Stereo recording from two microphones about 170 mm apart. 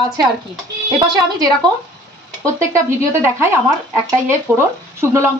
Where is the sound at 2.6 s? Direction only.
15° right (ahead or behind).